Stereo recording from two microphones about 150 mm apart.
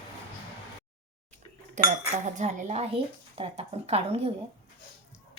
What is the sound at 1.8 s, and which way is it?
Cutlery, 55° right (ahead or behind).